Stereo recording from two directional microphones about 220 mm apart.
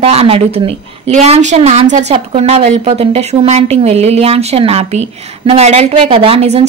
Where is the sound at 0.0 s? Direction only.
25° right (ahead or behind).